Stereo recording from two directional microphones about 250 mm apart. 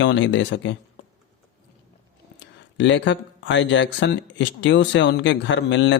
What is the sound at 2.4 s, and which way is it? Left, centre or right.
Speech, left.